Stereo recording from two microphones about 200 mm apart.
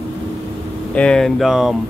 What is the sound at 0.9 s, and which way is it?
Speech, 5° left (ahead or behind).